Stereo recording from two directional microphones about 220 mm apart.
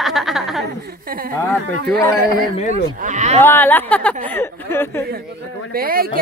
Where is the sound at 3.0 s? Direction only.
30° right (ahead or behind).